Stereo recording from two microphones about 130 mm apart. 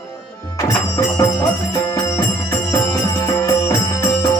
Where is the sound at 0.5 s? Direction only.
25° left (ahead or behind).